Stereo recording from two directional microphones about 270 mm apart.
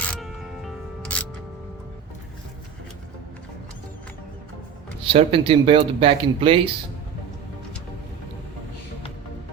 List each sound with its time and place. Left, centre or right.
0.1 s music: centre
5.0 s speech: right